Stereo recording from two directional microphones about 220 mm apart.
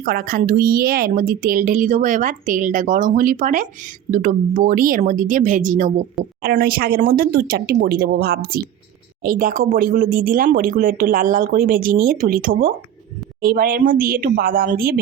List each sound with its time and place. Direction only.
0.0 s speech: 40° right (ahead or behind)